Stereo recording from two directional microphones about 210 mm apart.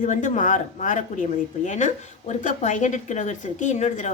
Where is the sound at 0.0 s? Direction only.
35° left (ahead or behind).